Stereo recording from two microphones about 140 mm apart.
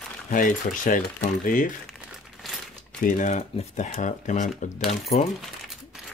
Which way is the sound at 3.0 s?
65° left (ahead or behind).